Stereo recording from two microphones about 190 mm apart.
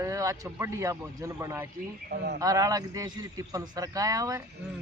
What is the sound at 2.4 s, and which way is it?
A man's voice, 20° right (ahead or behind).